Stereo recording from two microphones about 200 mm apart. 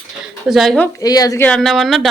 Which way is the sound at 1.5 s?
Centre (ahead or behind).